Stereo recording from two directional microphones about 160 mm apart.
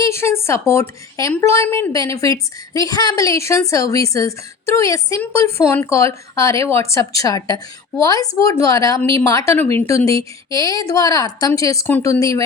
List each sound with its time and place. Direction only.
0.0 s speech: 15° left (ahead or behind)